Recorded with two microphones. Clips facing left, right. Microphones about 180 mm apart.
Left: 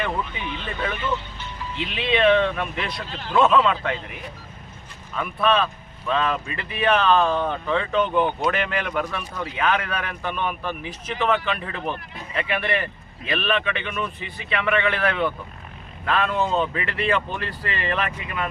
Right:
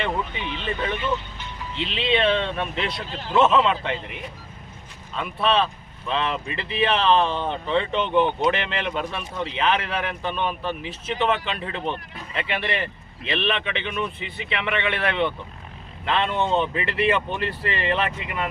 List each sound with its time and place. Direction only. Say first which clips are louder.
0.0 s speech: even; 25° right (ahead or behind)
5.1 s speech: left 1 dB; 30° right (ahead or behind)